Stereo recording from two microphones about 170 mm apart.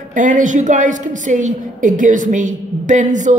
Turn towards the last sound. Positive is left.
turn(degrees=-45)  # may be behind; listen again after turning